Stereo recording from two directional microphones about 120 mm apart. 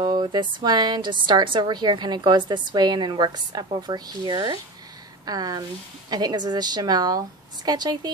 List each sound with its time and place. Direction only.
0.0 s a woman's voice: 40° right (ahead or behind)